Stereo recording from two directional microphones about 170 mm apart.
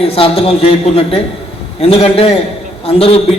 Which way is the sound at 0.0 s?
35° left (ahead or behind).